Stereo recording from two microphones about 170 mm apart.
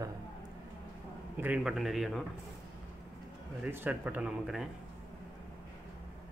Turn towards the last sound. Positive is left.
turn(degrees=-5)  # may be behind; listen again after turning